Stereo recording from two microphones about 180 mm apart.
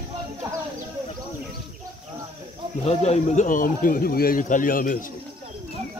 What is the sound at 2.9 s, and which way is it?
Speech, 40° left (ahead or behind).